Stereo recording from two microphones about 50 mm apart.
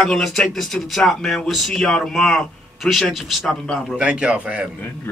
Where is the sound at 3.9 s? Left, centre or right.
Right.